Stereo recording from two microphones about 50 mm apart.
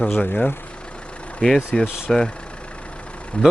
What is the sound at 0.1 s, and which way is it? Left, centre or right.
Speech, left.